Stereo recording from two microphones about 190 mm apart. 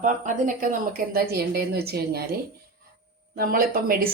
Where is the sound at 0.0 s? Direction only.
45° right (ahead or behind).